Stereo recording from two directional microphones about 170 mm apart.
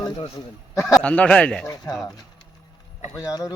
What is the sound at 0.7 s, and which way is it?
Speech, 15° left (ahead or behind).